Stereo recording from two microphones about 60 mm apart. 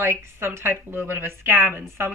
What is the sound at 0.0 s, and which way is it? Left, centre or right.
Speech, right.